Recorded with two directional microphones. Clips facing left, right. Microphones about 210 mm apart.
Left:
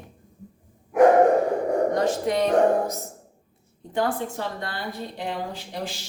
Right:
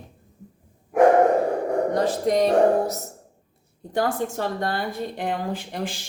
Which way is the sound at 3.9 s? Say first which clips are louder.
Right 2 dB; 45° right (ahead or behind).